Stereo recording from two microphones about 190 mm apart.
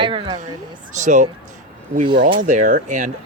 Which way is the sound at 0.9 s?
40° right (ahead or behind).